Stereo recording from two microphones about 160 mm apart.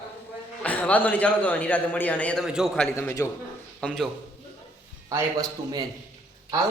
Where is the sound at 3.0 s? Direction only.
15° left (ahead or behind).